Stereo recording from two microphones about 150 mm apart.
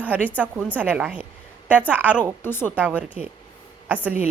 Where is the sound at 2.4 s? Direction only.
15° left (ahead or behind).